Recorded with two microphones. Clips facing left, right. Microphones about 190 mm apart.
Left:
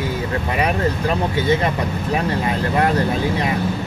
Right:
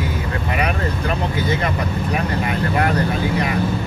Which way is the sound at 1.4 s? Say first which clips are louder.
Left 3 dB; 30° left (ahead or behind).